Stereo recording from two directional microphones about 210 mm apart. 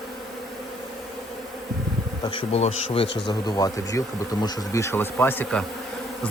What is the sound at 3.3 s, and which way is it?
Speech, 20° left (ahead or behind).